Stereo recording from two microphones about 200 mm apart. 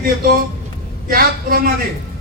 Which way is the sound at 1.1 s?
50° right (ahead or behind).